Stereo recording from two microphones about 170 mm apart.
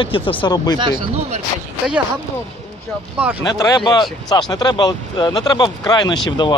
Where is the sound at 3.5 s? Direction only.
25° left (ahead or behind).